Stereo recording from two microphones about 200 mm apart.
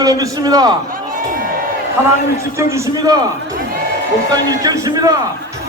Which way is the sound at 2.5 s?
15° right (ahead or behind).